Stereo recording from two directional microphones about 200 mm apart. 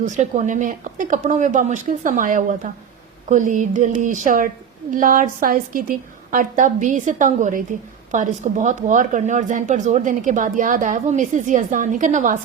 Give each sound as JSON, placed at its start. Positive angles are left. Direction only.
{"t": 0.0, "sound": "a woman's voice", "side_deg": -40}